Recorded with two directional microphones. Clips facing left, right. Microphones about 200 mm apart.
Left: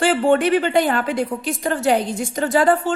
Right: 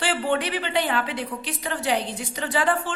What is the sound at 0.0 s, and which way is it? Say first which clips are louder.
Speech: left 8 dB; 45° left (ahead or behind).